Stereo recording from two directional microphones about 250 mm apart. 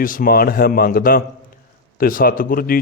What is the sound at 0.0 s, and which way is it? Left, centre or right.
A man's voice, left.